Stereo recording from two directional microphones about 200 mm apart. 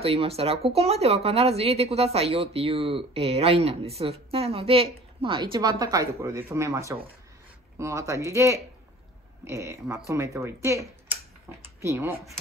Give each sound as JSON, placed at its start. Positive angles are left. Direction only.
{"t": 0.0, "sound": "speech", "side_deg": -30}